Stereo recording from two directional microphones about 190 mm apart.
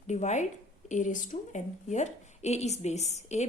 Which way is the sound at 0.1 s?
40° left (ahead or behind).